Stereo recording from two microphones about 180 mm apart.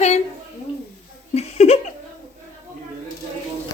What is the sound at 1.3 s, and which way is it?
Speech, 35° left (ahead or behind).